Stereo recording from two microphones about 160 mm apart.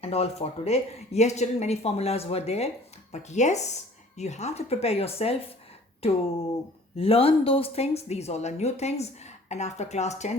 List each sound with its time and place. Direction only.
0.0 s speech: 40° left (ahead or behind)